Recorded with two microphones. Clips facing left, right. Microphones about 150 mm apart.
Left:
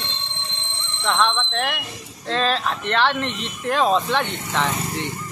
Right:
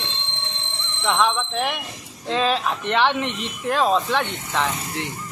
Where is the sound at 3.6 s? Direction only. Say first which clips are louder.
Left 1 dB; centre (ahead or behind).